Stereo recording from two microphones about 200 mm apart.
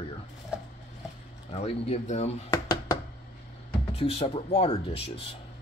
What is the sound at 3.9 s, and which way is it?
A man's voice, 30° left (ahead or behind).